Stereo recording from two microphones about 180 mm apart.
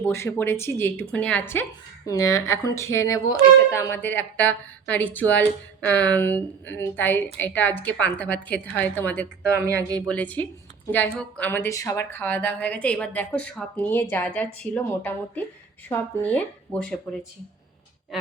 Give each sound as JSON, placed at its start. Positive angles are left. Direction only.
{"t": 0.0, "sound": "a woman's voice", "side_deg": 15}